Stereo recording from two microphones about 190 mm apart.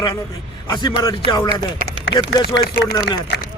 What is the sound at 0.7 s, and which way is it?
Speech, 20° left (ahead or behind).